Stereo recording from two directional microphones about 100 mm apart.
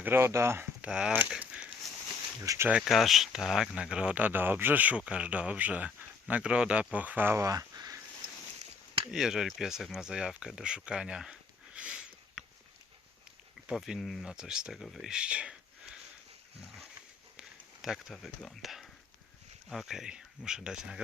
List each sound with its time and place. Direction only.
0.0 s speech: 25° right (ahead or behind)
0.9 s speech: 5° right (ahead or behind)
2.4 s speech: 30° right (ahead or behind)
2.8 s speech: centre (ahead or behind); by 7.4 s 20° right (ahead or behind)
7.4 s a sound: 35° right (ahead or behind)
9.1 s speech: 5° right (ahead or behind)
13.7 s speech: 5° right (ahead or behind)
17.8 s speech: centre (ahead or behind)